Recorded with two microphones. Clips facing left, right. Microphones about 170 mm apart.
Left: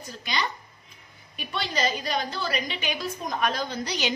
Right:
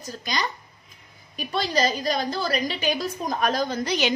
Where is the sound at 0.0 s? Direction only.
40° right (ahead or behind).